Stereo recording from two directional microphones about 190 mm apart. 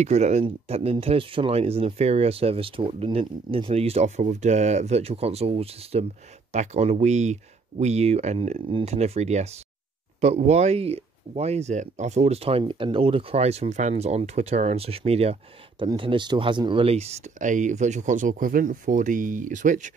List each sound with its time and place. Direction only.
0.0 s speech: 35° right (ahead or behind)